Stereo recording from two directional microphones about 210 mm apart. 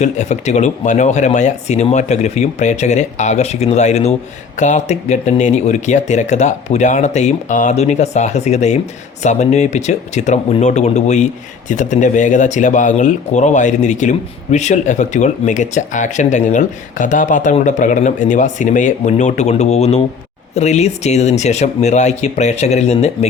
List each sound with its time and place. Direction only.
0.0 s speech: 35° left (ahead or behind)